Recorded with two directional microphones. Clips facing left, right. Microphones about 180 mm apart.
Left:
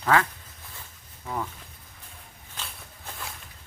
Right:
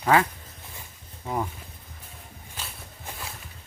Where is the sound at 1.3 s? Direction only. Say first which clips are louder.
Right 3 dB; 20° right (ahead or behind).